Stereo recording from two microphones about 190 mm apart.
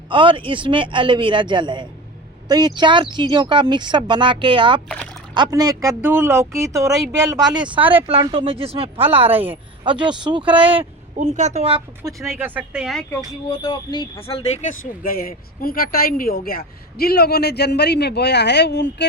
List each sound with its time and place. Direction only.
0.1 s speech: 25° right (ahead or behind)
7.6 s speech: 10° right (ahead or behind)
8.0 s speech: 30° right (ahead or behind)
11.2 s a woman's voice: 40° right (ahead or behind)
12.0 s speech: 20° right (ahead or behind)
12.4 s speech: 10° right (ahead or behind)
13.5 s speech: 25° left (ahead or behind)
14.7 s speech: 45° left (ahead or behind); by 19.0 s 65° left (ahead or behind)